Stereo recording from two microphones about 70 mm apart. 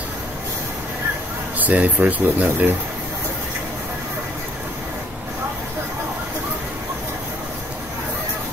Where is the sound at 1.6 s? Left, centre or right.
Right.